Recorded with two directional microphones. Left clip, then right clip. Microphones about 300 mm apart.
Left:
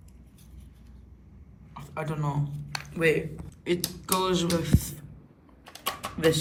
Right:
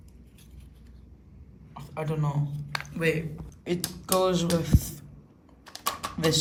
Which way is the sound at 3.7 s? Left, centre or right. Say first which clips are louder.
Even; centre.